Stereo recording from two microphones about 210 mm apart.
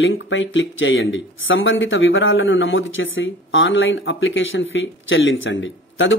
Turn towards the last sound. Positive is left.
turn(degrees=65)  # may be behind; listen again after turning